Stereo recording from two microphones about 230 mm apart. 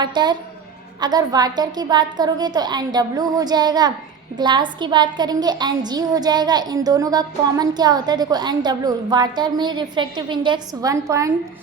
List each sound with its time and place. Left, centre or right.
0.0 s a woman's voice: centre